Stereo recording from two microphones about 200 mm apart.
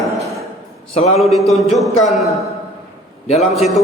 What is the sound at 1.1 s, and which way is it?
A man's voice, centre (ahead or behind).